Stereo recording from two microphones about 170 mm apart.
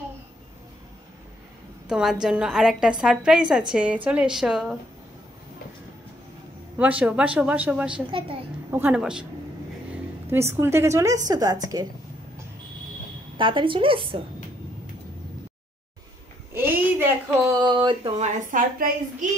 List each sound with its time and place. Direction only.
1.9 s a woman's voice: 5° right (ahead or behind)
6.8 s speech: 10° right (ahead or behind)
8.1 s a woman's voice: 30° right (ahead or behind)
8.7 s a woman's voice: 10° right (ahead or behind)
10.3 s a woman's voice: 15° right (ahead or behind)
13.4 s a woman's voice: 30° right (ahead or behind)
16.5 s a sound: 15° right (ahead or behind)
17.6 s a woman's voice: 25° right (ahead or behind)
18.2 s a woman's voice: 50° right (ahead or behind)